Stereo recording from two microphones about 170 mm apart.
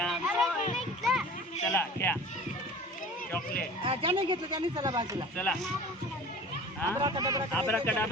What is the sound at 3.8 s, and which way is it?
Speech, 30° right (ahead or behind).